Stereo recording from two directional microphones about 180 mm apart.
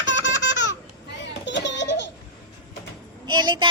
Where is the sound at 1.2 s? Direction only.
80° left.